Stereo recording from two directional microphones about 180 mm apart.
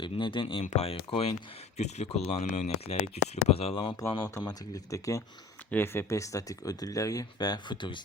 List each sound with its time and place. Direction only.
0.0 s speech: 25° left (ahead or behind)
4.2 s speech: 15° left (ahead or behind)